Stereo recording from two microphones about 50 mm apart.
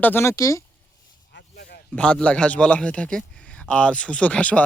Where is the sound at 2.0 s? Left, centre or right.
Centre.